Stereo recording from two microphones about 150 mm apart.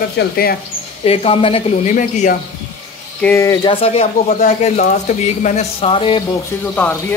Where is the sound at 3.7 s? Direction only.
40° left (ahead or behind).